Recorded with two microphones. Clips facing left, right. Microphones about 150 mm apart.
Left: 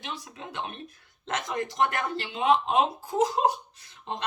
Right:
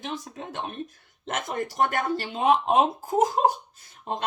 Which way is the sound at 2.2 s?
45° right (ahead or behind).